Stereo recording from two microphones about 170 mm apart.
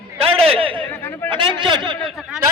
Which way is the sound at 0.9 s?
15° left (ahead or behind).